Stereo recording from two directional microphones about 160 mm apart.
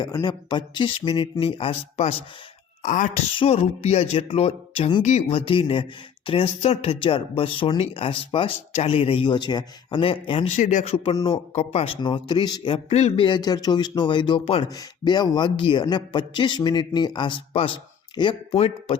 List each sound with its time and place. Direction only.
0.0 s speech: 25° left (ahead or behind)
2.8 s speech: 50° left (ahead or behind)
3.3 s speech: 35° left (ahead or behind)
10.6 s speech: 50° left (ahead or behind)
10.9 s speech: 35° left (ahead or behind)
12.9 s speech: 45° left (ahead or behind)
13.2 s a man's voice: 25° left (ahead or behind)
14.7 s a man's voice: 25° left (ahead or behind)